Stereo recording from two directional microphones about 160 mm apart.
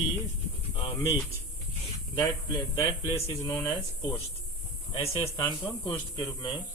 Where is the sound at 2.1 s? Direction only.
25° left (ahead or behind).